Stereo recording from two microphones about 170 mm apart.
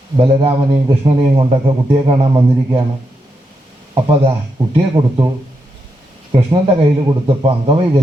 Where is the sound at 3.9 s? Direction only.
30° right (ahead or behind).